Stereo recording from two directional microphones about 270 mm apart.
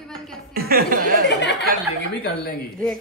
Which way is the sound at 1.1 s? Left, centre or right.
Left.